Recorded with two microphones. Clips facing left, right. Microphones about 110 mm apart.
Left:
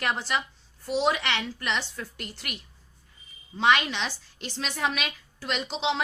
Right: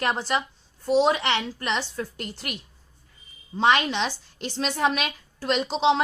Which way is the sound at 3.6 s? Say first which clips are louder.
Right 2 dB; 35° right (ahead or behind).